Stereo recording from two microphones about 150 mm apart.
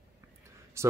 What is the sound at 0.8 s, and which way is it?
Speech, 20° right (ahead or behind).